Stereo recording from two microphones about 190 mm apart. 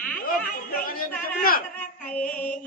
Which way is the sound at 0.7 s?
50° left (ahead or behind).